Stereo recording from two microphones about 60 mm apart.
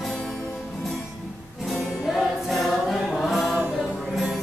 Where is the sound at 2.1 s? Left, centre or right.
Centre.